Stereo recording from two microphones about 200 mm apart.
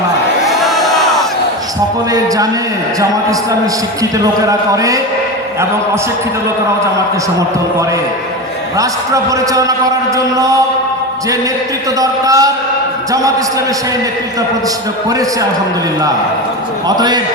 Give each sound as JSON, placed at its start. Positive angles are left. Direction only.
{"t": 0.4, "sound": "crowd", "side_deg": 0}
{"t": 2.1, "sound": "a man's voice", "side_deg": -15}
{"t": 4.4, "sound": "a man's voice", "side_deg": -15}
{"t": 8.8, "sound": "a man's voice", "side_deg": -15}
{"t": 11.9, "sound": "a man's voice", "side_deg": -15}
{"t": 15.1, "sound": "a man's voice", "side_deg": -15}
{"t": 17.0, "sound": "speech", "side_deg": -20}